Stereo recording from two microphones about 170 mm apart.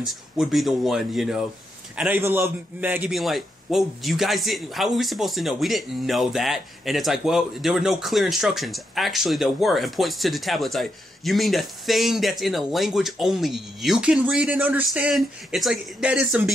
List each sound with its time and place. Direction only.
0.0 s a man's voice: centre (ahead or behind)
3.1 s speech: centre (ahead or behind)